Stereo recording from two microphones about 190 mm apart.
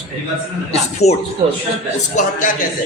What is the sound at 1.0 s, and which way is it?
Speech, 35° left (ahead or behind).